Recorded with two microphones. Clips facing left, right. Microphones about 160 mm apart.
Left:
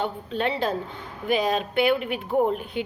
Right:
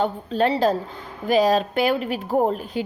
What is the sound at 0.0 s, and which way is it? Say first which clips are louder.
A woman's voice: right 5 dB; 35° right (ahead or behind).